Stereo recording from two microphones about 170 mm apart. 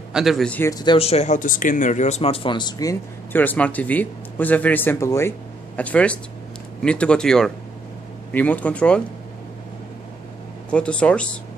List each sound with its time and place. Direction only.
0.1 s speech: centre (ahead or behind)
0.7 s speech: 25° left (ahead or behind)
0.9 s speech: 35° left (ahead or behind); by 9.0 s 5° left (ahead or behind)
10.7 s speech: 5° left (ahead or behind)